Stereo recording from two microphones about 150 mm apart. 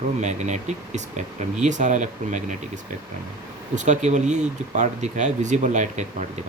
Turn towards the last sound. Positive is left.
turn(degrees=-55)  # may be behind; listen again after turning